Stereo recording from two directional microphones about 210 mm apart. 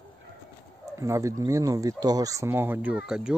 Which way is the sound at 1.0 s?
15° right (ahead or behind).